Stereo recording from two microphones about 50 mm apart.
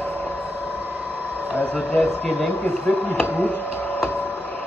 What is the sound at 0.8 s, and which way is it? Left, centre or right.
Vehicle, right.